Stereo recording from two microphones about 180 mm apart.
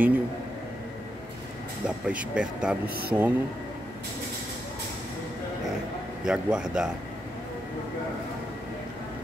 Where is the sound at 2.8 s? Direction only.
60° right (ahead or behind).